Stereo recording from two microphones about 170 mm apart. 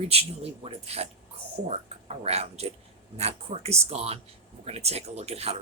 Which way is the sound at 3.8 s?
35° right (ahead or behind).